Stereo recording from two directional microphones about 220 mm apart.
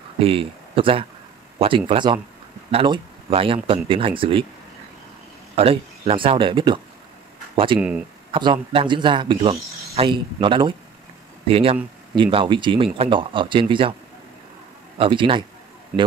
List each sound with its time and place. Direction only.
0.2 s speech: 25° right (ahead or behind)
5.6 s speech: 25° right (ahead or behind)
15.0 s speech: 25° right (ahead or behind)